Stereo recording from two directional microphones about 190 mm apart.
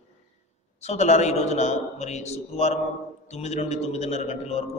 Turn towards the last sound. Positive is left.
turn(degrees=35)  # may be behind; listen again after turning